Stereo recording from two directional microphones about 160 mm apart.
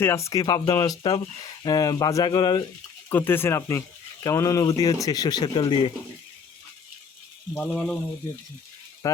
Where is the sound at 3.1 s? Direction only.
15° left (ahead or behind); by 5.9 s 30° left (ahead or behind).